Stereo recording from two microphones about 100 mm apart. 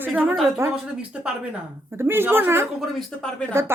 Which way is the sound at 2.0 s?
20° right (ahead or behind).